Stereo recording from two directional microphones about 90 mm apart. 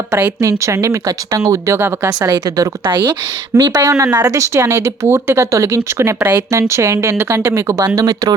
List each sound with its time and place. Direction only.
0.4 s speech: 35° right (ahead or behind)
3.5 s speech: 45° right (ahead or behind)
7.9 s speech: 45° right (ahead or behind)